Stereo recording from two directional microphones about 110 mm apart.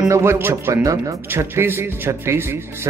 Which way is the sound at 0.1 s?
25° right (ahead or behind).